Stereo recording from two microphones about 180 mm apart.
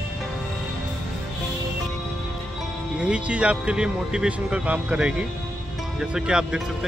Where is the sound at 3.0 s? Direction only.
5° right (ahead or behind).